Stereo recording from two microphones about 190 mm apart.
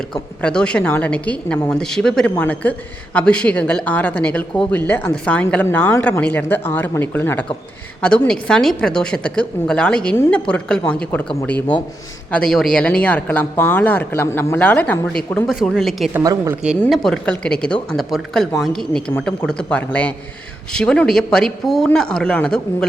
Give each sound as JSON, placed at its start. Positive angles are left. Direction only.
{"t": 0.1, "sound": "a woman's voice", "side_deg": 5}
{"t": 16.1, "sound": "a woman's voice", "side_deg": -20}
{"t": 16.8, "sound": "a woman's voice", "side_deg": 5}